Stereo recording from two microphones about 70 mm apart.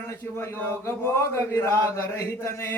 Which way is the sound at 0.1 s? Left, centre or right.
Left.